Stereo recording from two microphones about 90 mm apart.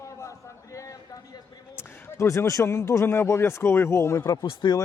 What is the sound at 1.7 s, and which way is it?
Speech, 35° left (ahead or behind).